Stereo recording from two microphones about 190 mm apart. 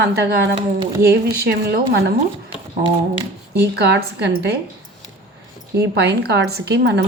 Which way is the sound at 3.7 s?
60° right (ahead or behind).